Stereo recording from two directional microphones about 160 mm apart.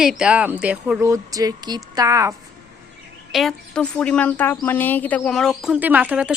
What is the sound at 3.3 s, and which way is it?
A woman's voice, centre (ahead or behind).